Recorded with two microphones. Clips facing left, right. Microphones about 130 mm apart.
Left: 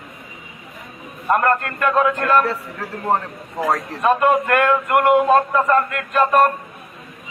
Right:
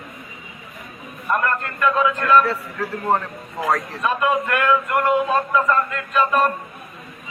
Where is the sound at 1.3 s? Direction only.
55° left (ahead or behind).